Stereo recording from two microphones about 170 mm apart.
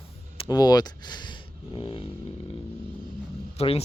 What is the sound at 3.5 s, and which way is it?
Speech, 35° left (ahead or behind).